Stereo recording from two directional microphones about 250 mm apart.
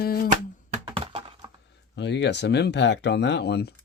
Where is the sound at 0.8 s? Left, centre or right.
Right.